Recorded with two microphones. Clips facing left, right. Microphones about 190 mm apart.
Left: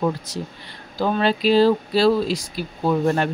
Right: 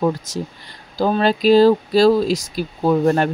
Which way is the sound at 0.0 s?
45° right (ahead or behind).